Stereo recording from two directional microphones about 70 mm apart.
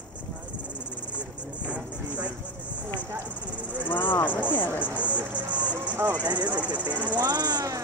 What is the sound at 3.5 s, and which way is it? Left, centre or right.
Cricket, centre.